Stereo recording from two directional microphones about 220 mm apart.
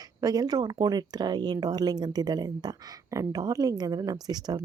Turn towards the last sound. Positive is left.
turn(degrees=-20)  # may be behind; listen again after turning